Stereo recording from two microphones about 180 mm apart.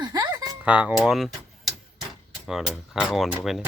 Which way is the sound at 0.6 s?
5° right (ahead or behind).